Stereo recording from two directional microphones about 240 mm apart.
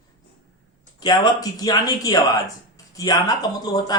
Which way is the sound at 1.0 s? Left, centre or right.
Centre.